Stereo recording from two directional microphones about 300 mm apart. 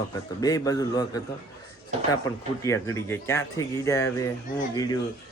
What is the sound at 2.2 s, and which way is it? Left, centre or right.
Speech, centre.